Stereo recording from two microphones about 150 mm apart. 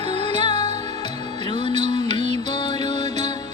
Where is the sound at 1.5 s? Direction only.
35° left (ahead or behind).